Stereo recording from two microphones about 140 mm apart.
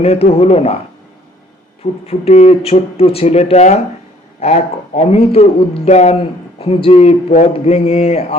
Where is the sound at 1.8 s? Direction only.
45° left (ahead or behind).